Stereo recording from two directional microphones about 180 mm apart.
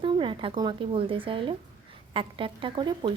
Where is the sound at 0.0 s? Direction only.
30° right (ahead or behind).